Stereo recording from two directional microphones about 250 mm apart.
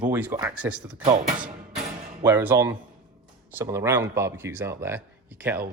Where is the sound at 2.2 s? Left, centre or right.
Centre.